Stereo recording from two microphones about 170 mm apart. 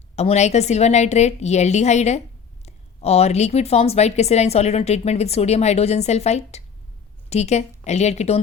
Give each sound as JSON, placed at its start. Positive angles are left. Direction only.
{"t": 0.2, "sound": "a woman's voice", "side_deg": 40}